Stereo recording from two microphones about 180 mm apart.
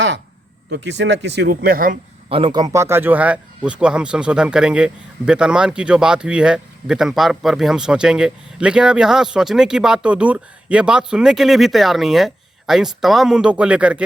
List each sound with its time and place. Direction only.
0.7 s speech: 75° right (ahead or behind); by 2.0 s 50° right (ahead or behind)
2.3 s speech: 25° right (ahead or behind); by 14.0 s 5° right (ahead or behind)